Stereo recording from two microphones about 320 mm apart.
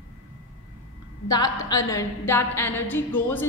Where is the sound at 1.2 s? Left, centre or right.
Centre.